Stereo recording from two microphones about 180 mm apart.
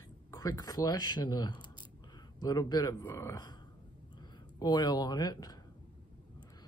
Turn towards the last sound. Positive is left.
turn(degrees=20)  # may be behind; listen again after turning